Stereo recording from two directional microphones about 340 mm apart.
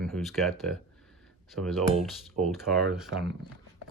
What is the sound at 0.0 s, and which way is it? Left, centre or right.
Speech, centre.